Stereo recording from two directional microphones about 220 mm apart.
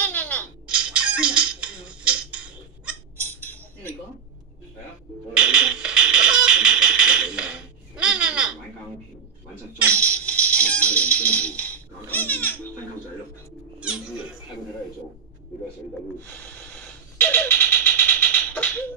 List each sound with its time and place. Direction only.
0.0 s baby laughter: 5° left (ahead or behind)
0.7 s squawk: 5° right (ahead or behind)
3.2 s a sound: 10° left (ahead or behind)
5.3 s music: 5° right (ahead or behind)
9.9 s music: 5° left (ahead or behind)
13.7 s cat: 5° right (ahead or behind)
16.4 s a sound: 5° left (ahead or behind)